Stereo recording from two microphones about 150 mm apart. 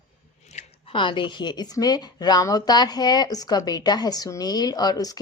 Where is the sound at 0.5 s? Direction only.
50° left (ahead or behind).